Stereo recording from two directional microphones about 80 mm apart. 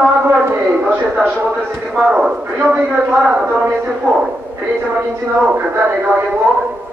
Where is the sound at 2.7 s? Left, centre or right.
Centre.